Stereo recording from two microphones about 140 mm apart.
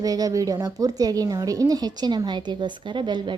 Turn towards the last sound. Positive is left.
turn(degrees=-35)  # may be behind; listen again after turning